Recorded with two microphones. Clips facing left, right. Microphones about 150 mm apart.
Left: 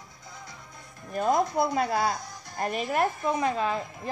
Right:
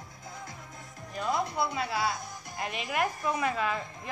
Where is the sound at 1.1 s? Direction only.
45° left (ahead or behind).